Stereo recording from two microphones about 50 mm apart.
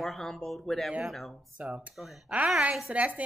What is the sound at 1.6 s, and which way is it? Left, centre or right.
Speech, right.